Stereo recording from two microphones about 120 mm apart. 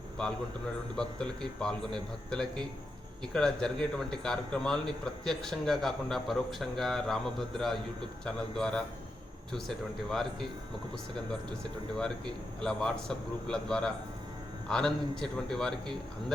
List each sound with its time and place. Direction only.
0.9 s a man's voice: 5° left (ahead or behind)
12.6 s a man's voice: 5° left (ahead or behind)